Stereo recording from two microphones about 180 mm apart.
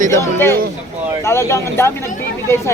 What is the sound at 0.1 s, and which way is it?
Speech, 15° left (ahead or behind).